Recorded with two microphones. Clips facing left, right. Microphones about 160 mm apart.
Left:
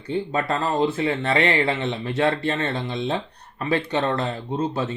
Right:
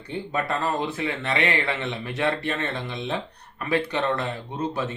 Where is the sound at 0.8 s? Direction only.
30° left (ahead or behind).